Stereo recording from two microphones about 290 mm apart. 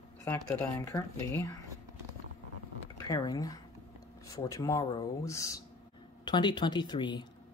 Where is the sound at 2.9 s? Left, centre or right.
Centre.